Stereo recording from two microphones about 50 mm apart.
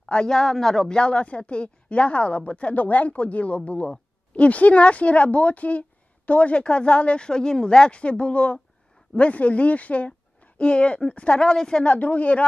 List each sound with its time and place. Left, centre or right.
0.0 s a man's voice: centre
0.8 s speech: centre
11.8 s speech: left